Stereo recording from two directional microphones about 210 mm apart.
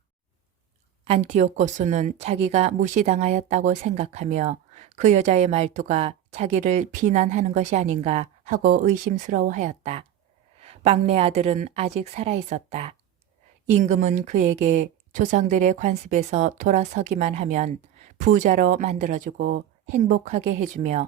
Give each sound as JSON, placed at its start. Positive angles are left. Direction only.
{"t": 1.0, "sound": "speech", "side_deg": -30}